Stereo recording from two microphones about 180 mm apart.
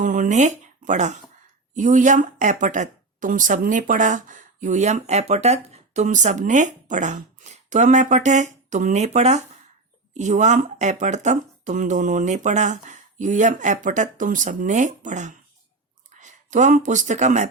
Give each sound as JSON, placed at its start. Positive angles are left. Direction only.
{"t": 0.0, "sound": "speech", "side_deg": -45}